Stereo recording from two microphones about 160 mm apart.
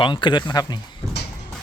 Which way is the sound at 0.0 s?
30° left (ahead or behind).